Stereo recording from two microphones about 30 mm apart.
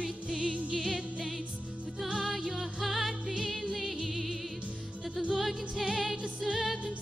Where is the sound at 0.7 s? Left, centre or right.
Centre.